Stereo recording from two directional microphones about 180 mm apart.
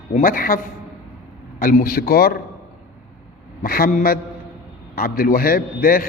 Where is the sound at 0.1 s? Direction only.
50° left (ahead or behind).